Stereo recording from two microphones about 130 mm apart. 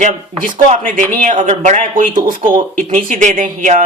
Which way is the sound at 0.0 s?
75° right (ahead or behind).